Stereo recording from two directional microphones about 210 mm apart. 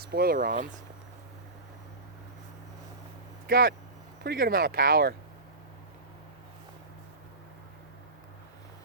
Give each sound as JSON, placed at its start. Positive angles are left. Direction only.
{"t": 0.0, "sound": "speech", "side_deg": -45}
{"t": 3.4, "sound": "speech", "side_deg": -45}